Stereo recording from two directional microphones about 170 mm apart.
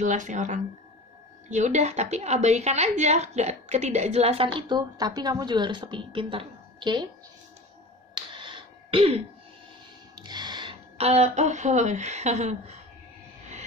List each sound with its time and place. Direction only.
0.0 s a woman's voice: 45° right (ahead or behind); by 7.1 s 25° right (ahead or behind)
8.1 s a sound: 30° right (ahead or behind)
10.1 s speech: 25° right (ahead or behind); by 12.7 s 40° right (ahead or behind)